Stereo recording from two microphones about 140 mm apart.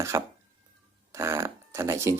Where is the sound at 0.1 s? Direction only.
25° right (ahead or behind).